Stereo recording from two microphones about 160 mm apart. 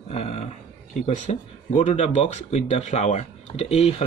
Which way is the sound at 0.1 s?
40° left (ahead or behind).